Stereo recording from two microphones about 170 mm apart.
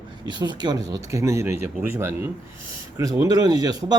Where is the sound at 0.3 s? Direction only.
25° right (ahead or behind).